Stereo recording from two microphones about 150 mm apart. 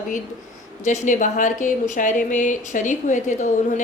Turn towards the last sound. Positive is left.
turn(degrees=55)  # may be behind; listen again after turning